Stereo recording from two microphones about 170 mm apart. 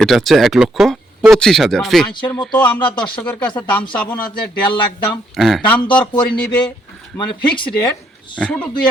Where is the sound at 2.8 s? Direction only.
25° left (ahead or behind).